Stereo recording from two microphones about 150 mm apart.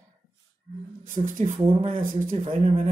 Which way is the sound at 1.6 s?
35° right (ahead or behind).